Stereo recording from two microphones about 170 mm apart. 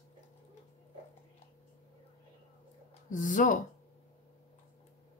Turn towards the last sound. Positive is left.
turn(degrees=50)  # may be behind; listen again after turning